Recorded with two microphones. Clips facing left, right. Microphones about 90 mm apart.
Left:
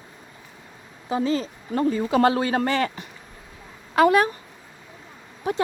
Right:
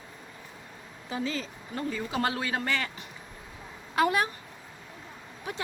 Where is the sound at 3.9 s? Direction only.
75° left (ahead or behind).